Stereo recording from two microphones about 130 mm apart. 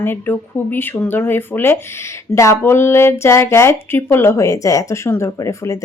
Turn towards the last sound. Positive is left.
turn(degrees=25)  # may be behind; listen again after turning